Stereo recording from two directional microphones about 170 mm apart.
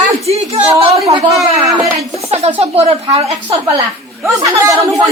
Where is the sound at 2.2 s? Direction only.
35° right (ahead or behind).